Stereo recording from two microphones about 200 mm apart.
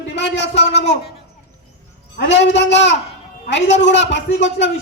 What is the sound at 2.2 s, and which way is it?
A man's voice, 60° left (ahead or behind).